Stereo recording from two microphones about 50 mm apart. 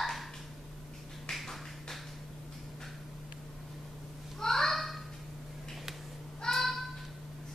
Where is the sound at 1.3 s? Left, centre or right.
Centre.